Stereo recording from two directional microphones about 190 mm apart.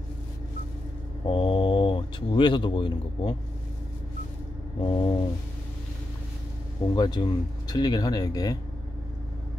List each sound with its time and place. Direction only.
1.2 s speech: 25° left (ahead or behind)
4.7 s speech: 25° left (ahead or behind)
7.0 s speech: 20° left (ahead or behind)